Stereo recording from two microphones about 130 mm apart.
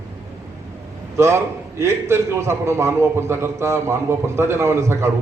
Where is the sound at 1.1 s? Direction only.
20° right (ahead or behind).